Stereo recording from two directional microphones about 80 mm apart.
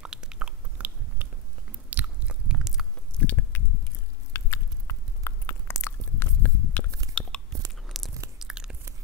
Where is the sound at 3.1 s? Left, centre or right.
Centre.